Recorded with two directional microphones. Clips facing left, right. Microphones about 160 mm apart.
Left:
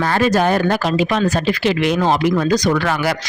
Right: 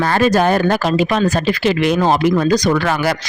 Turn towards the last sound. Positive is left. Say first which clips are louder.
# right 1 dB
turn(degrees=-40)  # may be behind; listen again after turning